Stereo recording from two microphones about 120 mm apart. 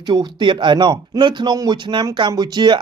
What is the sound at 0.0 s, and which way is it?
Speech, 35° right (ahead or behind).